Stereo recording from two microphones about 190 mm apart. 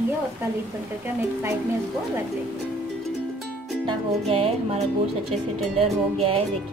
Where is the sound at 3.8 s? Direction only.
30° right (ahead or behind).